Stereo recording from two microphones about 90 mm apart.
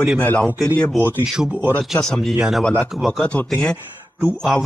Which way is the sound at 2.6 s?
15° left (ahead or behind).